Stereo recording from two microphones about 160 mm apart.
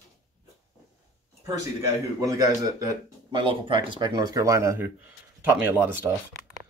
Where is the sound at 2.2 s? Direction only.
20° right (ahead or behind).